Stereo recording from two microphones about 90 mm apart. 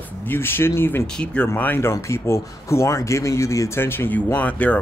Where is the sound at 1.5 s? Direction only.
25° left (ahead or behind).